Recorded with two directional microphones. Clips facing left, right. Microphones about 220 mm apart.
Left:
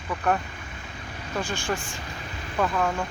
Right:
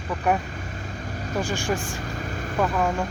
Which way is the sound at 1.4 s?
35° right (ahead or behind).